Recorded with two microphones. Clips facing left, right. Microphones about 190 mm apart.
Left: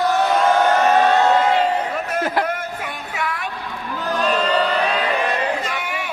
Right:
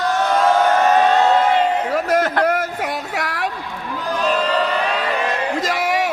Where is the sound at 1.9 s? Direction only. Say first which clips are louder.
Right 5 dB; 85° right.